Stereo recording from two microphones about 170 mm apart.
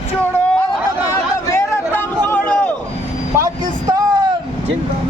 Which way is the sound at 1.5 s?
15° left (ahead or behind).